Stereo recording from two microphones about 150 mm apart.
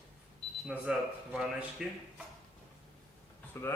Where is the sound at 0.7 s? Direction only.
5° right (ahead or behind).